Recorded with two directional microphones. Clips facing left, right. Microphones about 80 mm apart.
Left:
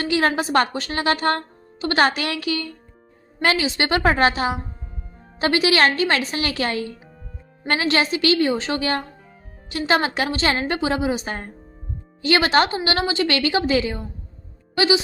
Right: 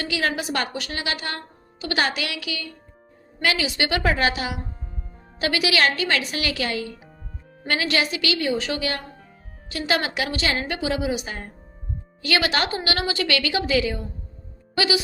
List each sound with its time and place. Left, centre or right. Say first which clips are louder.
0.0 s a woman's voice: left 5 dB; left